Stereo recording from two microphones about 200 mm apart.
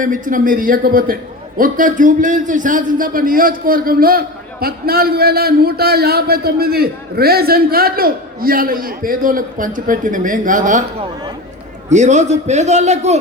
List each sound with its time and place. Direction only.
0.0 s a man's voice: 40° right (ahead or behind)